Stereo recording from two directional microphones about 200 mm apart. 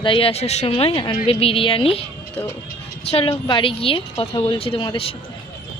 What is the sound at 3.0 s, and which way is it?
Speech, 30° left (ahead or behind).